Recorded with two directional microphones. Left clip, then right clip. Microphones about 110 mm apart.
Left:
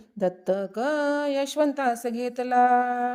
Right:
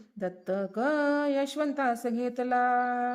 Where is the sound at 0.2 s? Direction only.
45° left (ahead or behind).